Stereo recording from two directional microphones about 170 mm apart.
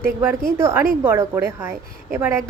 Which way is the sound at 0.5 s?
15° right (ahead or behind).